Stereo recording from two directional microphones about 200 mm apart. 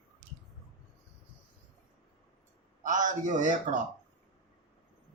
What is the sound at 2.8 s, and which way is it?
Speech, 40° right (ahead or behind).